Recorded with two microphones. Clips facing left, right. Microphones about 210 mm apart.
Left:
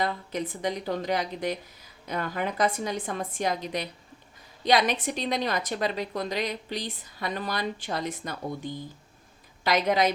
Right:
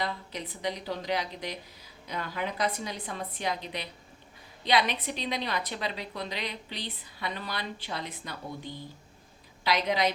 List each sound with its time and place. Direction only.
0.0 s a woman's voice: 50° left (ahead or behind)